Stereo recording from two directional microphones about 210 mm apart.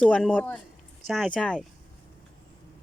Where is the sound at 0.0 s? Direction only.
5° left (ahead or behind).